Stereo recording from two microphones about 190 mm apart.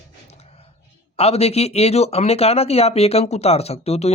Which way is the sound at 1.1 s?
30° left (ahead or behind).